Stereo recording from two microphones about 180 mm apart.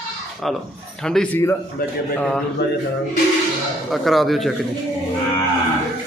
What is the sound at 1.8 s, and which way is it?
Speech, 55° left (ahead or behind).